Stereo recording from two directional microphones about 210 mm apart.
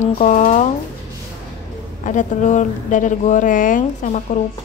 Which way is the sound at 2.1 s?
35° left (ahead or behind).